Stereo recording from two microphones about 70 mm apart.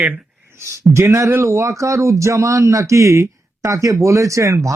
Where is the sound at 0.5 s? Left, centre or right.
Right.